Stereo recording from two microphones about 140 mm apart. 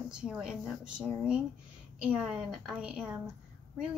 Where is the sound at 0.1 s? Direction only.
5° right (ahead or behind).